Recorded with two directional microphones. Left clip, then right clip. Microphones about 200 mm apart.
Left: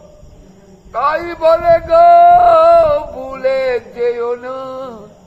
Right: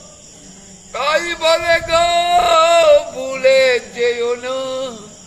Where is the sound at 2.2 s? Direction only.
5° right (ahead or behind).